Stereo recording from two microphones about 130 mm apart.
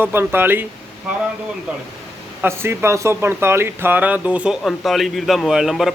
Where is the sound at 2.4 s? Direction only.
20° right (ahead or behind).